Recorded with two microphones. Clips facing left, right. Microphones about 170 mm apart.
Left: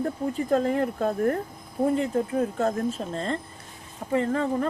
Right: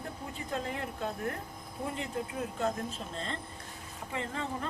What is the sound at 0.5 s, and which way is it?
Speech, 45° left (ahead or behind).